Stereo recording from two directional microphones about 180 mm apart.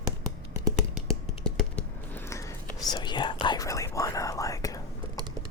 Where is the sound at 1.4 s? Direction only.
5° left (ahead or behind).